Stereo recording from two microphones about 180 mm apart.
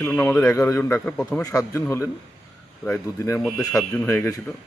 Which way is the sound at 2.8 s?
15° left (ahead or behind).